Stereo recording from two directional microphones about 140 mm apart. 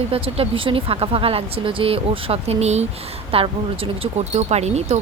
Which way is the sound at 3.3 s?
40° right (ahead or behind).